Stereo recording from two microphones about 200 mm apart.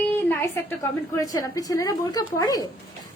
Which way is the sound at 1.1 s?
15° left (ahead or behind).